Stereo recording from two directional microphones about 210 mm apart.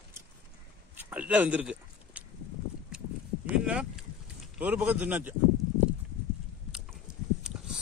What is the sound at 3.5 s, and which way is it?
Speech, 5° right (ahead or behind).